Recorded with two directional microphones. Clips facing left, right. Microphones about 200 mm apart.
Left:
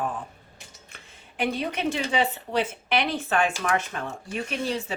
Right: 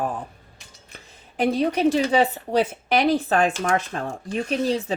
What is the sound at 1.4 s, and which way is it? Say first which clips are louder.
Speech: right 7 dB; 35° right (ahead or behind).